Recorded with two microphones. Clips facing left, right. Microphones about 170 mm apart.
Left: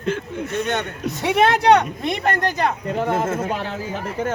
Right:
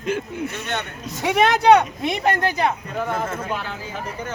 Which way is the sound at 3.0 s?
25° left (ahead or behind).